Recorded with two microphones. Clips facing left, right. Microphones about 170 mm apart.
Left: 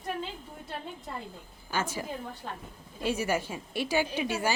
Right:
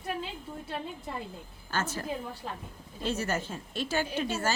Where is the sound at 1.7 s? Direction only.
10° left (ahead or behind).